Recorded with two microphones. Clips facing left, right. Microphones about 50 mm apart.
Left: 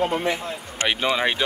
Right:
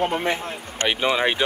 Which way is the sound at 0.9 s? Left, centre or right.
Centre.